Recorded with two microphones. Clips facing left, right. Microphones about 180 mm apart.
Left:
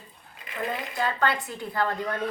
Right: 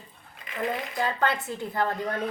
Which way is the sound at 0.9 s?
20° right (ahead or behind).